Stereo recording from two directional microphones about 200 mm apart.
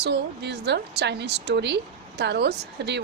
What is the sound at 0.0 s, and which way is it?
Speech, 55° right (ahead or behind).